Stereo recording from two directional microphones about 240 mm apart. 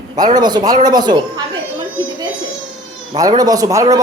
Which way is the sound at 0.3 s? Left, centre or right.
Centre.